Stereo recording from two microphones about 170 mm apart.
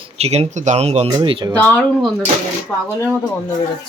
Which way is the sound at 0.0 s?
40° right (ahead or behind).